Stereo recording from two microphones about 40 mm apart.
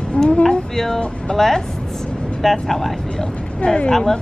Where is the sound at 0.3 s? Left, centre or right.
Left.